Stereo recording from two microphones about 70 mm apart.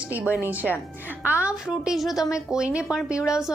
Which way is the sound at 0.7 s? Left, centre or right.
Left.